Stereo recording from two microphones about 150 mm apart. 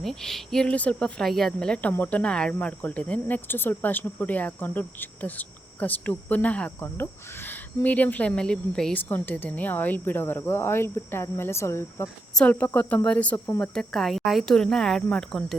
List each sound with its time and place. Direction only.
0.0 s speech: centre (ahead or behind); by 12.0 s 20° left (ahead or behind)
12.0 s speech: 5° left (ahead or behind)